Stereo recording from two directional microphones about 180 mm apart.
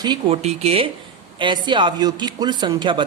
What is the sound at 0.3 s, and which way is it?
Speech, 35° right (ahead or behind).